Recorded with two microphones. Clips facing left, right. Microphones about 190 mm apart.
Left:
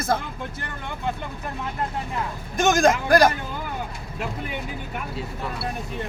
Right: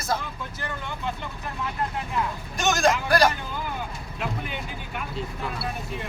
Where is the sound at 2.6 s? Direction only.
50° left (ahead or behind).